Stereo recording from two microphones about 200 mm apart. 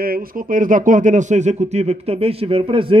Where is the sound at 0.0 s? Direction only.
45° right (ahead or behind).